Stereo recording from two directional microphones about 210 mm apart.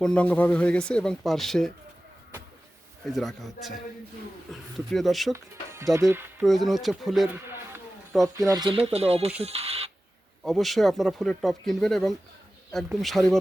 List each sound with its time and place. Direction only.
0.0 s speech: 5° left (ahead or behind)
3.1 s speech: centre (ahead or behind)
5.3 s speech: 15° right (ahead or behind)
6.4 s speech: centre (ahead or behind); by 9.9 s 30° right (ahead or behind)
10.4 s speech: centre (ahead or behind)